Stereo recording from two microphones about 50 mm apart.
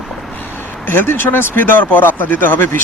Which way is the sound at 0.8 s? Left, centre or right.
Left.